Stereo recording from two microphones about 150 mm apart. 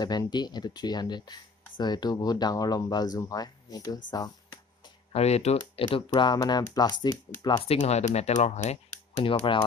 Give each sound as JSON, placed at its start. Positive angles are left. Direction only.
{"t": 0.0, "sound": "speech", "side_deg": 25}
{"t": 5.1, "sound": "speech", "side_deg": 45}
{"t": 5.9, "sound": "speech", "side_deg": 30}
{"t": 7.6, "sound": "speech", "side_deg": 40}